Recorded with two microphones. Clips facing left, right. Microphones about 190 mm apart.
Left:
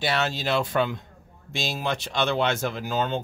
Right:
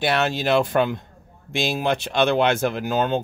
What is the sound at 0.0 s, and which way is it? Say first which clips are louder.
Speech: right 5 dB; 55° right (ahead or behind).